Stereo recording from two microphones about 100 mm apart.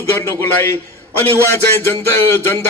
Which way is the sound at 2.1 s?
25° left (ahead or behind).